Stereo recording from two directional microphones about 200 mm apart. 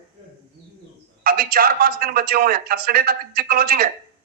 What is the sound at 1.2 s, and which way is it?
A man's voice, 50° right (ahead or behind).